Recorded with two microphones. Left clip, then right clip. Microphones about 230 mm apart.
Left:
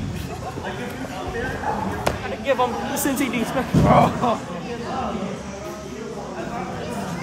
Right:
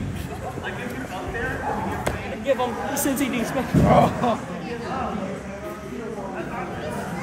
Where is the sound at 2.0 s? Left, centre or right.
Centre.